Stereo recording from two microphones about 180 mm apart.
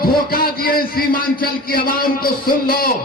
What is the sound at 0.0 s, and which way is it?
A man's voice, 55° left (ahead or behind).